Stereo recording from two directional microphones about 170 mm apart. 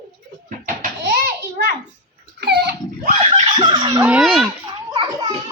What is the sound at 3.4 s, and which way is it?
Fowl, 25° right (ahead or behind).